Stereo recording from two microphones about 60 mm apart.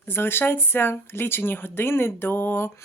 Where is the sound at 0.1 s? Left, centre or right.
Left.